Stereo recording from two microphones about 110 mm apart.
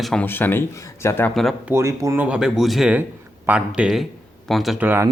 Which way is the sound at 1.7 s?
25° right (ahead or behind).